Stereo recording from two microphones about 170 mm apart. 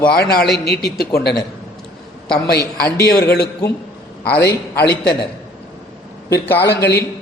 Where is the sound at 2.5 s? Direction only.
65° left (ahead or behind).